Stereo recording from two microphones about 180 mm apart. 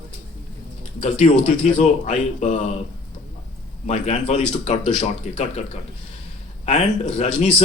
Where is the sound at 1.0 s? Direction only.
35° left (ahead or behind).